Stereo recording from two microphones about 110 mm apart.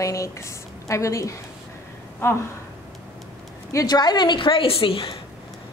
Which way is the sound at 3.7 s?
35° left (ahead or behind).